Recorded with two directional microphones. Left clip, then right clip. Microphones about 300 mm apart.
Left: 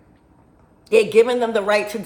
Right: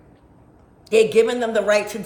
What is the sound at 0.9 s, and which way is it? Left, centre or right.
A man's voice, centre.